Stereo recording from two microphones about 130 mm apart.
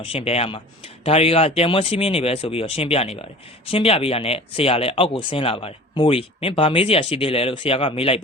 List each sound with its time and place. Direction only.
0.0 s speech: 45° left (ahead or behind)